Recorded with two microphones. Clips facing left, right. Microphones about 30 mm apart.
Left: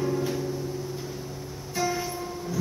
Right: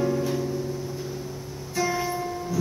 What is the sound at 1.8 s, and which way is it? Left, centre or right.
Music, centre.